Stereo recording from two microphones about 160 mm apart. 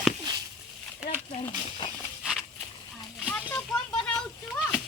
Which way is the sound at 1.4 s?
30° left (ahead or behind).